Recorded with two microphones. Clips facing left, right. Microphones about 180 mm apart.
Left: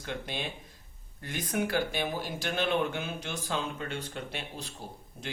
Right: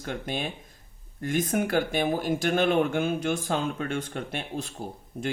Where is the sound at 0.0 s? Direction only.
50° right (ahead or behind).